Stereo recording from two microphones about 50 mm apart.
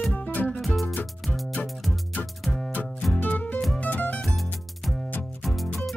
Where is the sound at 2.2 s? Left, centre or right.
Centre.